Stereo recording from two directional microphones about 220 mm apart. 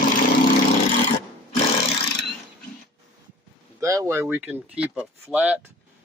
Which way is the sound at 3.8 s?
15° right (ahead or behind).